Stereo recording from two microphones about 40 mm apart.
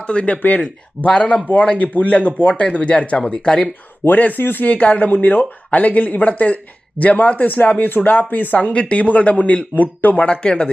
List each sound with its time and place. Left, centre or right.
0.0 s speech: left
4.0 s speech: left
4.6 s speech: left
8.5 s speech: left
9.7 s speech: left
10.2 s speech: left